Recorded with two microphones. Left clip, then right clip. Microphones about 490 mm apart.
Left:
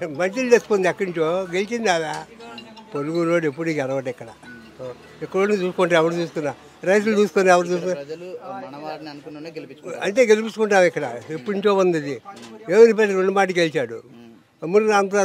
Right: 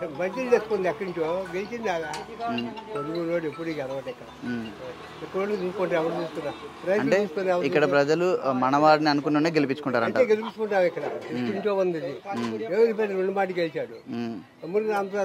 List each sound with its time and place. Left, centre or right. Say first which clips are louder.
0.0 s speech: left 6 dB; left
3.2 s speech: left 9 dB; left
5.4 s speech: left 7 dB; left
8.0 s a man's voice: right 11 dB; right
10.0 s speech: left 8 dB; left